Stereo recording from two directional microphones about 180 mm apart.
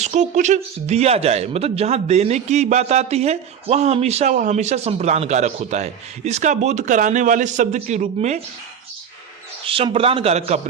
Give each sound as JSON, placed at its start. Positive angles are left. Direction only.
{"t": 0.0, "sound": "speech", "side_deg": -40}
{"t": 9.6, "sound": "speech", "side_deg": -30}